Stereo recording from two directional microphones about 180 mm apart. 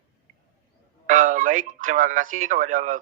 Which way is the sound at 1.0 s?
45° right (ahead or behind).